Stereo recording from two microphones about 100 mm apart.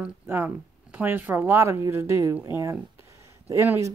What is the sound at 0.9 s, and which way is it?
Speech, 20° right (ahead or behind).